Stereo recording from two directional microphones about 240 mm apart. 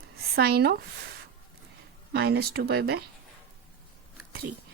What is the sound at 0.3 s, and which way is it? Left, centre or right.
Speech, right.